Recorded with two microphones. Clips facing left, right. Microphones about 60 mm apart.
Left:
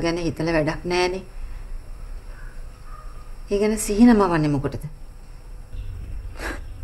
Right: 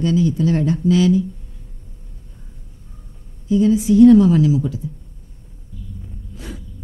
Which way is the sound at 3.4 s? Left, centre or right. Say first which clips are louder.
Right 6 dB; left.